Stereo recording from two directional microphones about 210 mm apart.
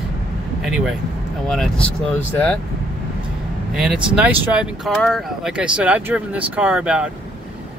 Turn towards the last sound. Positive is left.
turn(degrees=-5)  # may be behind; listen again after turning